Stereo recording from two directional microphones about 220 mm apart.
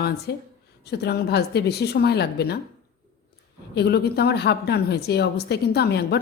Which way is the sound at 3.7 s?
50° left (ahead or behind).